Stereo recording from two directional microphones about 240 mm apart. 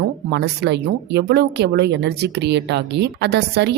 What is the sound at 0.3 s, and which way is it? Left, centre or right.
Speech, right.